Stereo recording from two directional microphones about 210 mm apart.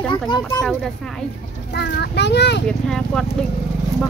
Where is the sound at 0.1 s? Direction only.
20° left (ahead or behind).